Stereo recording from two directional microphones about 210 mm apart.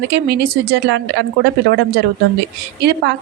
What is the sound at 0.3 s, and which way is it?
A woman's voice, 50° right (ahead or behind).